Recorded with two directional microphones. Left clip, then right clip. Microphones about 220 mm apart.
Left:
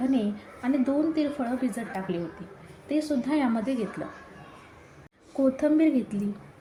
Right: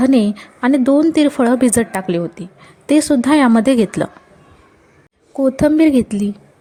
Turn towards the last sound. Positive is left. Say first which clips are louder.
# right 11 dB
turn(degrees=-35)  # may be behind; listen again after turning